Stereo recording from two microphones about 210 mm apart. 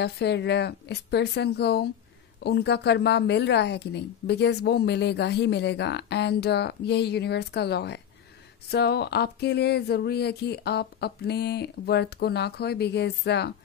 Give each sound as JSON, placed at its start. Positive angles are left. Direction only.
{"t": 0.0, "sound": "a woman's voice", "side_deg": 55}